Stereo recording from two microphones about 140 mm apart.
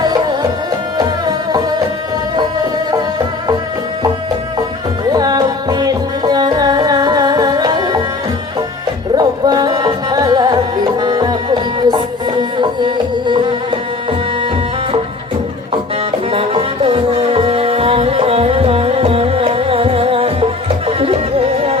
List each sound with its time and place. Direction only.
0.0 s music: 30° right (ahead or behind)
5.1 s music: 30° right (ahead or behind)
9.1 s music: 30° right (ahead or behind)
16.3 s music: 40° right (ahead or behind)